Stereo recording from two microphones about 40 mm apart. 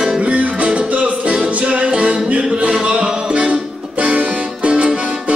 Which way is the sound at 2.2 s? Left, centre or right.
Right.